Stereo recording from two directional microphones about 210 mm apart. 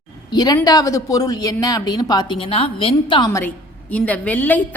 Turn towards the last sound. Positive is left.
turn(degrees=10)  # may be behind; listen again after turning